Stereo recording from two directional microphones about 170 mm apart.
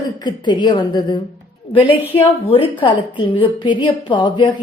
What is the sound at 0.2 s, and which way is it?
A woman's voice, 25° left (ahead or behind).